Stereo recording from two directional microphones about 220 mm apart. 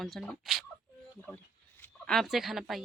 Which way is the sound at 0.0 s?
Centre (ahead or behind).